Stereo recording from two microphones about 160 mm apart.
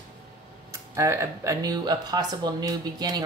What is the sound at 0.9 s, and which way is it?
Speech, 20° right (ahead or behind).